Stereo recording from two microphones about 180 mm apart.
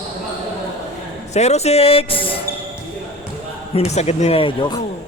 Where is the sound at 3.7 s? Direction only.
35° left (ahead or behind).